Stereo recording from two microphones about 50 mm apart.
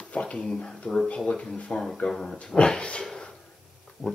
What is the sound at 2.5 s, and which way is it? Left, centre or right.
Speech, centre.